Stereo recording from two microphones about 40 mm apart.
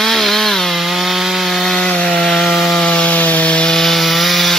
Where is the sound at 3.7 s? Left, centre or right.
Centre.